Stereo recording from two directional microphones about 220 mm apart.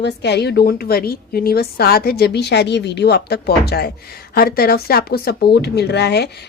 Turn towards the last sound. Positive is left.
turn(degrees=50)  # may be behind; listen again after turning